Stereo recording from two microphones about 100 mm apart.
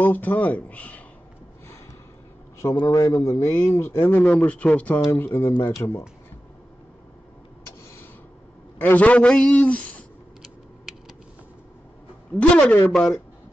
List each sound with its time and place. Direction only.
0.0 s a man's voice: 20° left (ahead or behind)
2.6 s a man's voice: 35° left (ahead or behind); by 5.0 s 15° left (ahead or behind)
5.0 s a man's voice: 30° left (ahead or behind)
8.7 s a man's voice: 15° left (ahead or behind)
10.4 s typing: 5° right (ahead or behind)
12.3 s a man's voice: 10° left (ahead or behind)